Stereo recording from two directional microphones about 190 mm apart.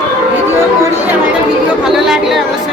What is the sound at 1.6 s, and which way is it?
Speech, centre (ahead or behind).